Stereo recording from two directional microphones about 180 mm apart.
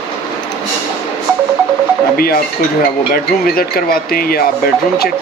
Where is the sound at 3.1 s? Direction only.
55° left (ahead or behind).